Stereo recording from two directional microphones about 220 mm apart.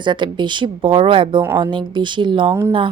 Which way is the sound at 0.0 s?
20° right (ahead or behind).